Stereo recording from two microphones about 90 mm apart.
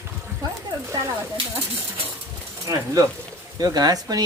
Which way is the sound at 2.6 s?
35° right (ahead or behind).